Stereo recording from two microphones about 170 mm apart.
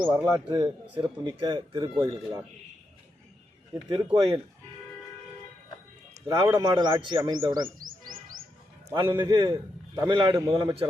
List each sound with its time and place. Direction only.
0.1 s a man's voice: 15° right (ahead or behind)
3.8 s a man's voice: 25° right (ahead or behind)
6.1 s a man's voice: 20° right (ahead or behind)
9.0 s a man's voice: 25° right (ahead or behind)